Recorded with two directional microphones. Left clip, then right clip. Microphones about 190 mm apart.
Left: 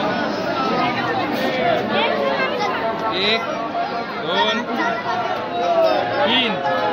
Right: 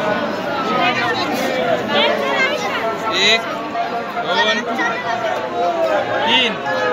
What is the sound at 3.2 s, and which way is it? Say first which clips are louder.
Speech: right 7 dB; 45° left (ahead or behind).